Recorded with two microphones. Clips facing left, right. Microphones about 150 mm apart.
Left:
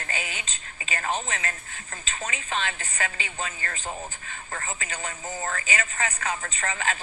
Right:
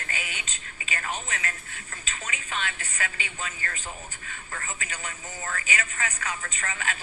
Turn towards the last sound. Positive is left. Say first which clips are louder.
# left 4 dB
turn(degrees=35)  # may be behind; listen again after turning